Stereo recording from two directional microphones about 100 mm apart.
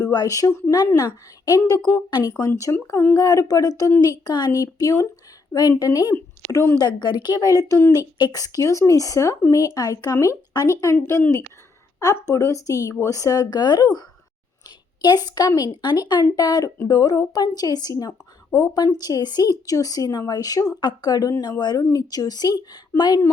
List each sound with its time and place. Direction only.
0.0 s a woman's voice: 40° left (ahead or behind)
2.5 s speech: 35° left (ahead or behind)
6.1 s a woman's voice: 25° left (ahead or behind)
6.7 s a woman's voice: 45° left (ahead or behind)
7.7 s a woman's voice: 25° left (ahead or behind)
7.9 s speech: 40° left (ahead or behind)
15.0 s a woman's voice: 40° left (ahead or behind)
21.6 s a woman's voice: 40° left (ahead or behind)